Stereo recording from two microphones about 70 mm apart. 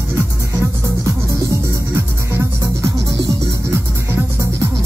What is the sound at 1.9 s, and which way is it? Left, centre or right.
Music, right.